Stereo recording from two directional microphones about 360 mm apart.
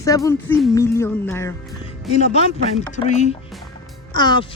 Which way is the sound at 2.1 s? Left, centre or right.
Centre.